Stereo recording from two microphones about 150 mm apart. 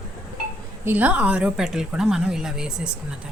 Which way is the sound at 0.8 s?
10° right (ahead or behind).